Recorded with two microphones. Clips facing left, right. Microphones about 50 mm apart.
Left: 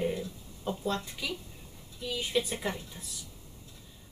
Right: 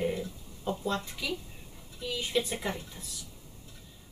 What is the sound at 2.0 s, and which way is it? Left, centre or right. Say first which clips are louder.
Speech: even; centre.